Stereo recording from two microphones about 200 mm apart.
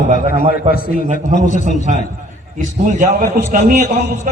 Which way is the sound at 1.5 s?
40° left (ahead or behind).